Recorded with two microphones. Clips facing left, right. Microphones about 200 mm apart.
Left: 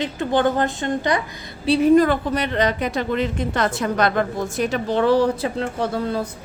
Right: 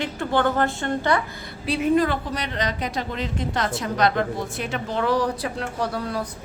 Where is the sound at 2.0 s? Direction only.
55° left (ahead or behind); by 6.2 s 25° left (ahead or behind).